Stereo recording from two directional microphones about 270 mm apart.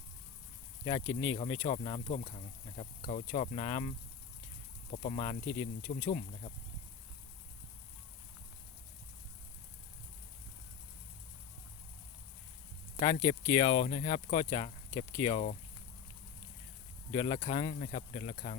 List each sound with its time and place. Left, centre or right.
0.9 s speech: centre
13.1 s speech: centre
13.8 s speech: left
17.1 s speech: centre